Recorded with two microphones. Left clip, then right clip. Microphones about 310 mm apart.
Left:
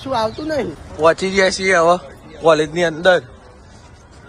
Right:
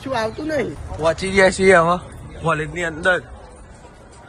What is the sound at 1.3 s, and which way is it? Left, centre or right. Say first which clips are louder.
Speech: right 2 dB; centre.